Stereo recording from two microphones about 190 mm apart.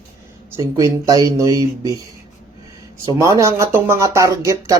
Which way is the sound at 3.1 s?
15° right (ahead or behind).